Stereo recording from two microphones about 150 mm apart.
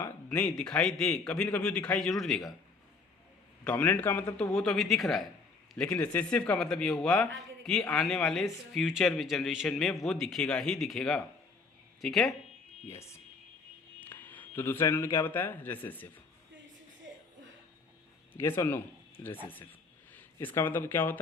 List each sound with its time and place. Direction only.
0.0 s a sound: 10° left (ahead or behind)
0.5 s a man's voice: 5° left (ahead or behind)
3.6 s a man's voice: 10° left (ahead or behind)
14.0 s speech: 10° left (ahead or behind)
18.3 s speech: 15° left (ahead or behind)
20.6 s speech: 15° left (ahead or behind)